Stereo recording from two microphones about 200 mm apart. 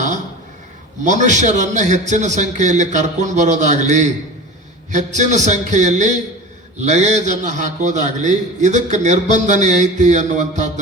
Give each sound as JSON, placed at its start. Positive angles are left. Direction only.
{"t": 1.0, "sound": "a man's voice", "side_deg": -40}